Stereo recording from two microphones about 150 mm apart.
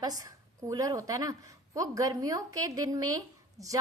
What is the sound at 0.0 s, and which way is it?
A woman's voice, 25° right (ahead or behind).